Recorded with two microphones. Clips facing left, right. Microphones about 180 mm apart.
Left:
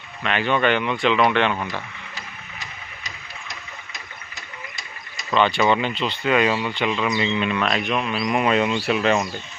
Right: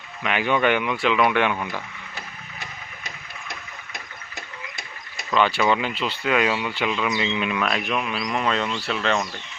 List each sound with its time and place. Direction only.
0.2 s speech: 10° right (ahead or behind)
2.1 s a sound: 55° right (ahead or behind)
5.3 s speech: 5° right (ahead or behind)